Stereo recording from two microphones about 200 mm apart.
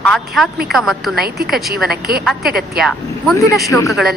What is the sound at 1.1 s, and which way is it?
A woman's voice, 50° right (ahead or behind).